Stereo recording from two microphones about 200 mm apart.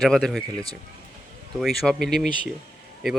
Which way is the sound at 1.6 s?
Centre (ahead or behind).